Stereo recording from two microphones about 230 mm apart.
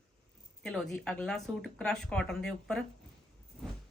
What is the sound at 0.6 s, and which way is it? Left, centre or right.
Speech, centre.